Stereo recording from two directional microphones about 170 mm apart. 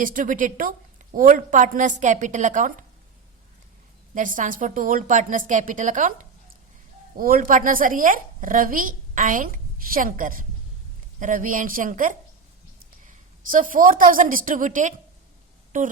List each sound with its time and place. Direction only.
0.0 s a woman's voice: 50° right (ahead or behind)
4.1 s a woman's voice: 50° right (ahead or behind)